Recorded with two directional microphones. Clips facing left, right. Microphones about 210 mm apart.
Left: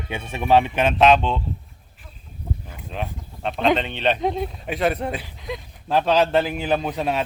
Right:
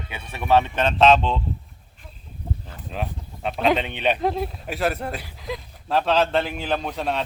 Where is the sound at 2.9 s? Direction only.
Centre (ahead or behind).